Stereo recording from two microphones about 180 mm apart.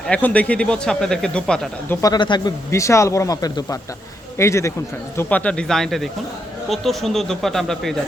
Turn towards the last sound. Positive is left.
turn(degrees=0)  # may be behind; listen again after turning